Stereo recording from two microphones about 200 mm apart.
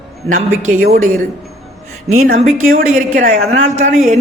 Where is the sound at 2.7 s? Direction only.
40° right (ahead or behind).